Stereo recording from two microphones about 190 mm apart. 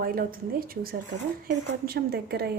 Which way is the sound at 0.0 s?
50° right (ahead or behind).